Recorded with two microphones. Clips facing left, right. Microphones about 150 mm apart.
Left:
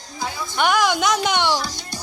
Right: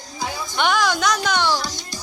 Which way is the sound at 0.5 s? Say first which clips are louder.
Left 1 dB; 5° left (ahead or behind).